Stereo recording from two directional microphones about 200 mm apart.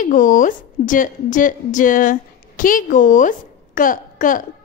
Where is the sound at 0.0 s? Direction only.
40° left (ahead or behind).